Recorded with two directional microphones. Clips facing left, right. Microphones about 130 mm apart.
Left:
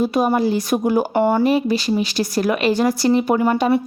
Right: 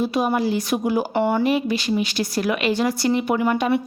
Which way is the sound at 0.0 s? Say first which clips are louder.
Left 3 dB; 45° left (ahead or behind).